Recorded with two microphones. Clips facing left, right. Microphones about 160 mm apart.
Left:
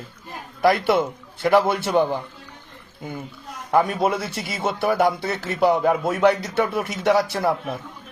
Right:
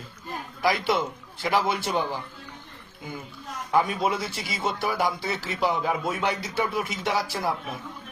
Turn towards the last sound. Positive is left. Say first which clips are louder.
# left 6 dB
turn(degrees=60)  # may be behind; listen again after turning